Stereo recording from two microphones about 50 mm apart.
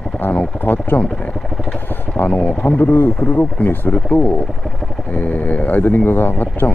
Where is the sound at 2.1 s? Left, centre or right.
Left.